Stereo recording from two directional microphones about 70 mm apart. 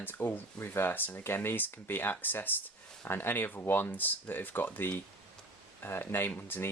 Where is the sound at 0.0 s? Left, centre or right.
Left.